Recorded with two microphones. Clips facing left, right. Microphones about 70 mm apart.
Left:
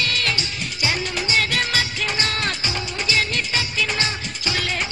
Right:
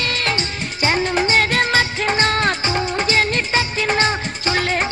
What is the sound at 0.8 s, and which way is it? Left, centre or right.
Music, right.